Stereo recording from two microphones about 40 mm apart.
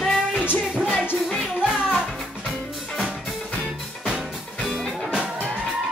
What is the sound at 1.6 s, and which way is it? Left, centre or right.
Music, right.